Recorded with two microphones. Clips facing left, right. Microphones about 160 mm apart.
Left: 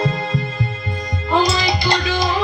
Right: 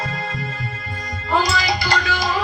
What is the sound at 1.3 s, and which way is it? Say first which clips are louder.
Music: left 2 dB; 20° left (ahead or behind).